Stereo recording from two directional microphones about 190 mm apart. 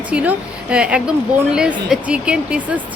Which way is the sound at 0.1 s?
5° right (ahead or behind).